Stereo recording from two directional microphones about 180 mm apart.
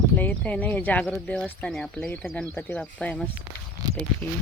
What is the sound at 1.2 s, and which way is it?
Speech, 5° left (ahead or behind).